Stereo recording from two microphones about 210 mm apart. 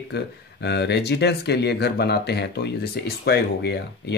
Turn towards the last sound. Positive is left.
turn(degrees=50)  # may be behind; listen again after turning